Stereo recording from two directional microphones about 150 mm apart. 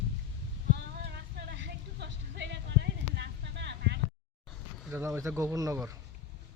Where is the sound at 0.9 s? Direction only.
90° right.